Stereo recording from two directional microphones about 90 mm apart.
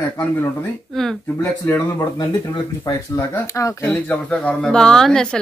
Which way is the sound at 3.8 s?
20° left (ahead or behind).